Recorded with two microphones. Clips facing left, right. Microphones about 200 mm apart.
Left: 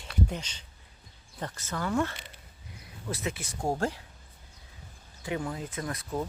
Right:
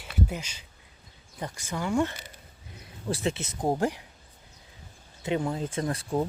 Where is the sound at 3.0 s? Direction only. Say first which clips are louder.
Right 5 dB; 30° right (ahead or behind).